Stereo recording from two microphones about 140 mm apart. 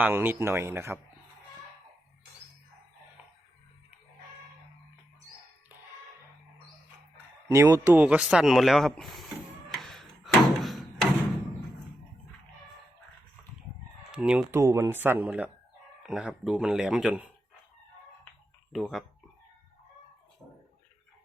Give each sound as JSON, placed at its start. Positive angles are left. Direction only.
{"t": 0.0, "sound": "speech", "side_deg": -15}
{"t": 7.4, "sound": "speech", "side_deg": -20}
{"t": 7.9, "sound": "speech", "side_deg": -10}
{"t": 9.6, "sound": "a sound", "side_deg": 0}
{"t": 14.1, "sound": "speech", "side_deg": -5}
{"t": 14.5, "sound": "speech", "side_deg": -20}
{"t": 18.7, "sound": "speech", "side_deg": 0}